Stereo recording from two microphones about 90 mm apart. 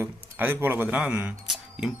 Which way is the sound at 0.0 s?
25° right (ahead or behind).